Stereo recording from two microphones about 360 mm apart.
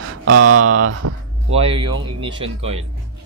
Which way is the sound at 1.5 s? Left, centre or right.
Centre.